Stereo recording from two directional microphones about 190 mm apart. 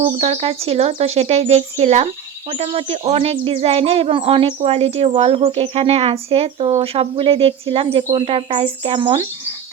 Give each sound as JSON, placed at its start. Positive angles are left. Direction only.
{"t": 0.0, "sound": "speech", "side_deg": -35}